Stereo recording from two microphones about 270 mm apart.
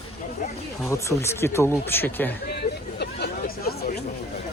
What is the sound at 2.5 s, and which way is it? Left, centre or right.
Hubbub, left.